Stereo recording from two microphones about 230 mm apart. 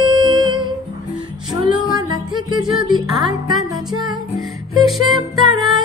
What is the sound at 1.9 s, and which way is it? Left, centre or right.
Music, centre.